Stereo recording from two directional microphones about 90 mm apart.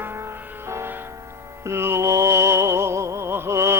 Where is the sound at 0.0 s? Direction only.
30° right (ahead or behind).